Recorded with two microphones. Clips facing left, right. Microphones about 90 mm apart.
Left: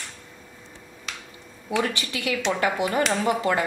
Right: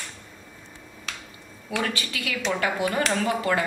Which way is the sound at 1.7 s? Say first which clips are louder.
Left 3 dB; 25° left (ahead or behind).